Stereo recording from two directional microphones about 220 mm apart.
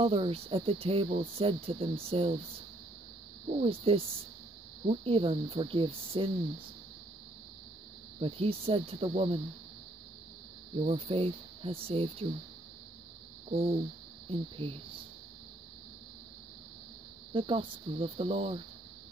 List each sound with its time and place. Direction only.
0.0 s speech: 25° right (ahead or behind)
3.4 s speech: 25° right (ahead or behind)
8.2 s speech: 25° right (ahead or behind)
10.7 s speech: 25° right (ahead or behind)
13.5 s a sound: 25° right (ahead or behind)
14.3 s speech: 25° right (ahead or behind)
17.3 s speech: 25° right (ahead or behind)